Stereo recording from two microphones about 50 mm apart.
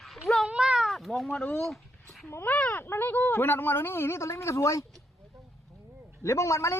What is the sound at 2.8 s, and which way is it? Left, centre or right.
Speech, left.